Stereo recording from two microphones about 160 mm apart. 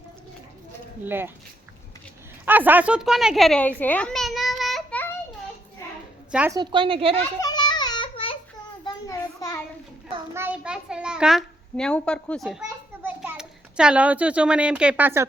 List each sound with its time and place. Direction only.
1.0 s speech: 15° right (ahead or behind)
2.4 s a child's voice: 10° right (ahead or behind)
6.5 s a woman's voice: 30° right (ahead or behind)
7.4 s child singing: 25° left (ahead or behind)
8.8 s a sound: 25° left (ahead or behind)
10.3 s a child's voice: 10° right (ahead or behind)
13.0 s a child's voice: 10° right (ahead or behind)